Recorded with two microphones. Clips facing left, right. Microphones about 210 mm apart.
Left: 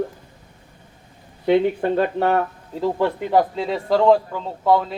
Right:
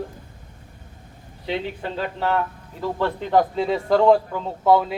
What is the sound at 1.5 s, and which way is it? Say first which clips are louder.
Speech: left 10 dB; 55° left (ahead or behind).